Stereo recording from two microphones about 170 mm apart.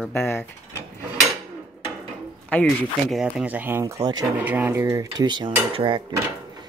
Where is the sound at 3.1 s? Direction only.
5° right (ahead or behind); by 4.2 s 20° right (ahead or behind).